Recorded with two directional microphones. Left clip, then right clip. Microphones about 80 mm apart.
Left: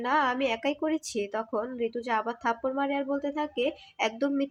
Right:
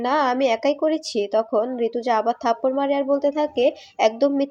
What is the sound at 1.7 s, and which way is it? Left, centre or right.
Speech, right.